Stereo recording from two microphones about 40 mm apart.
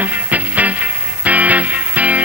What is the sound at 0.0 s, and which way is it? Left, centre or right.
Music, right.